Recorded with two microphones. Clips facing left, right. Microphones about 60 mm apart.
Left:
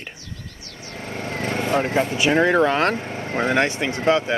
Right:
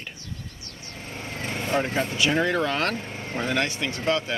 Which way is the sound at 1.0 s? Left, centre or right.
Left.